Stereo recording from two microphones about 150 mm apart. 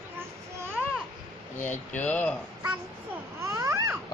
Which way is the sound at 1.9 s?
10° left (ahead or behind).